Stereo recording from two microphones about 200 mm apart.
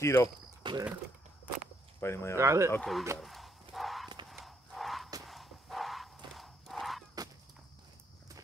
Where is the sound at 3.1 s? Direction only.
Centre (ahead or behind).